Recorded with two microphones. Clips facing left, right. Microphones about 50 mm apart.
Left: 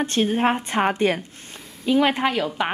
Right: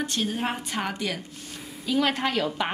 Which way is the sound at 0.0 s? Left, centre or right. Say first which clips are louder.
Left 7 dB; left.